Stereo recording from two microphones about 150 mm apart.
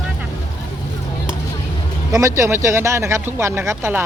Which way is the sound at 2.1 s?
20° right (ahead or behind).